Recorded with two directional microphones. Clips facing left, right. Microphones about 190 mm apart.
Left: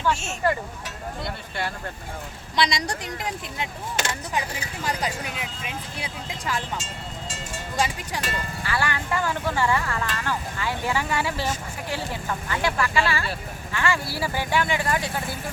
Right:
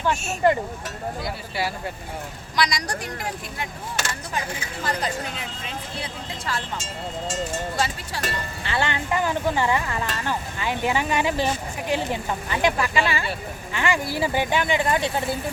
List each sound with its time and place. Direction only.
0.4 s speech: 20° right (ahead or behind)
1.2 s speech: 5° right (ahead or behind)
2.6 s speech: 25° left (ahead or behind)
8.6 s speech: 25° right (ahead or behind)